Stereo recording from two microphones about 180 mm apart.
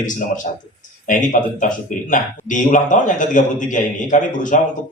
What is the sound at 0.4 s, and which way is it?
Speech, 40° left (ahead or behind).